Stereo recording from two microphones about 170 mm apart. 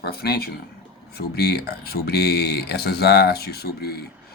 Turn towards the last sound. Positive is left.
turn(degrees=65)  # may be behind; listen again after turning